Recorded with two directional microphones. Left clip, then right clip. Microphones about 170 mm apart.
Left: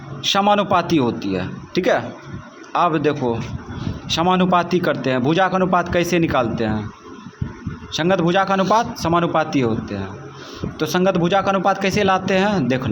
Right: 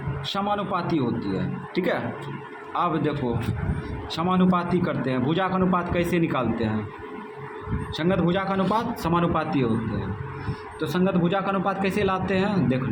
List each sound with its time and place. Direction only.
0.2 s a man's voice: 40° left (ahead or behind)
7.9 s a man's voice: 35° left (ahead or behind)
10.8 s a man's voice: 40° left (ahead or behind)